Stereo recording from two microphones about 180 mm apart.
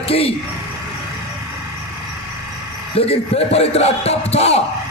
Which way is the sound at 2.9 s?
35° left (ahead or behind).